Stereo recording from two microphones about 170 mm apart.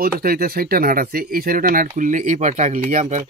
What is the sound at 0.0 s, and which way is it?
Speech, 60° right (ahead or behind).